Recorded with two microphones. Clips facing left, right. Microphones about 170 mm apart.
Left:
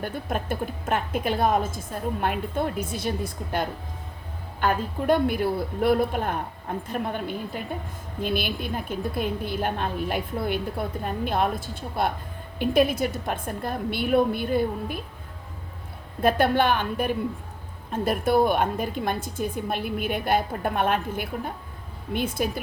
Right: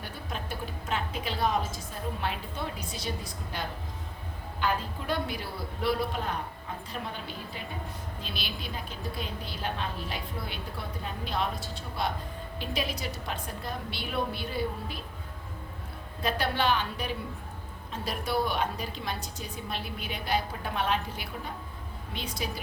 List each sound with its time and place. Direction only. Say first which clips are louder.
0.0 s a woman's voice: left 9 dB; 50° left (ahead or behind)
16.2 s a woman's voice: left 8 dB; 50° left (ahead or behind)